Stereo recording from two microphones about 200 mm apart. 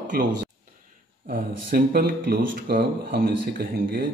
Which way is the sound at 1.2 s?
50° right (ahead or behind).